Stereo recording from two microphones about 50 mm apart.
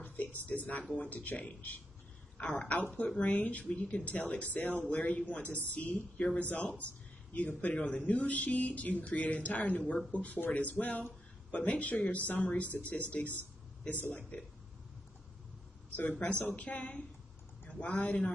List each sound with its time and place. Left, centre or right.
0.0 s a sound: left
0.9 s speech: left
2.5 s speech: left
16.2 s speech: left